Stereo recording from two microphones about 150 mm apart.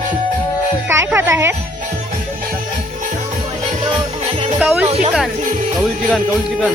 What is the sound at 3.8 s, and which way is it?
Music, 35° right (ahead or behind).